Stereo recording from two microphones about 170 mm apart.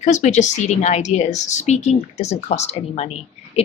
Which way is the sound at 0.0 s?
45° left (ahead or behind).